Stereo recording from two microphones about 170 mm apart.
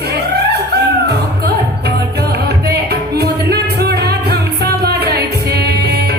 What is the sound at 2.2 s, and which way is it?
Music, 70° right (ahead or behind).